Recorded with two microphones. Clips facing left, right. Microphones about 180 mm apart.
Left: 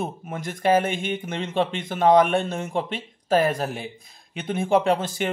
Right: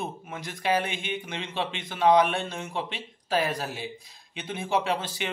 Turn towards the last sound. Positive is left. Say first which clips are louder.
# left 7 dB
turn(degrees=50)  # may be behind; listen again after turning